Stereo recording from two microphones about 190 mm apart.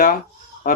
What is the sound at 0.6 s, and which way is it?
Fowl, 45° left (ahead or behind).